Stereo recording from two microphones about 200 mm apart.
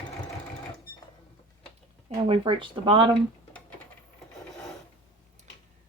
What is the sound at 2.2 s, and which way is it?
Speech, 25° right (ahead or behind).